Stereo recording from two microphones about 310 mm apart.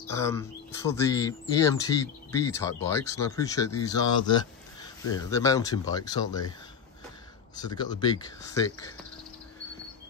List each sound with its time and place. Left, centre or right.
0.1 s speech: centre
7.5 s speech: centre